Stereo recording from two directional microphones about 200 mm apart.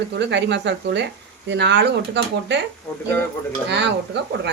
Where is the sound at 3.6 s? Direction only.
60° right (ahead or behind).